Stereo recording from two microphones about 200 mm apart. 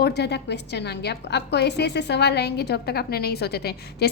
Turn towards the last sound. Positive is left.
turn(degrees=55)  # may be behind; listen again after turning